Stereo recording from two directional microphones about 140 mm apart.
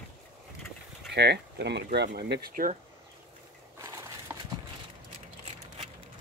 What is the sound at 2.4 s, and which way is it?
Speech, 80° right.